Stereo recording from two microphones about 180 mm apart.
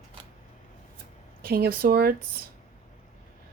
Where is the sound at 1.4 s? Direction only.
60° right (ahead or behind).